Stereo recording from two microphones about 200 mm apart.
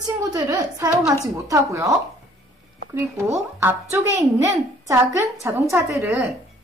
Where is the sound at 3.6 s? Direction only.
15° right (ahead or behind).